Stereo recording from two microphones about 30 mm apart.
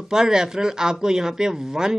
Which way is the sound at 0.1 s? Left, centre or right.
Right.